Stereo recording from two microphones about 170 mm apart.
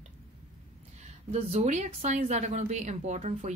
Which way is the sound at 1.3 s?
40° right (ahead or behind).